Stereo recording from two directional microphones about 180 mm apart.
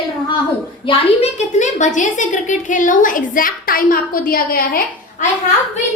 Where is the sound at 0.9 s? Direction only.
40° left (ahead or behind); by 4.8 s 55° left (ahead or behind).